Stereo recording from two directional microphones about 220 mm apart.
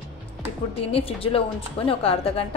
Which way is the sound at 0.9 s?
25° left (ahead or behind).